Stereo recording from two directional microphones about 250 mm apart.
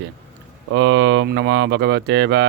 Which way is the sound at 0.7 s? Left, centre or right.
Right.